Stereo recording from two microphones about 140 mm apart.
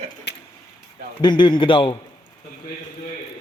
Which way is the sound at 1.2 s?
35° left (ahead or behind).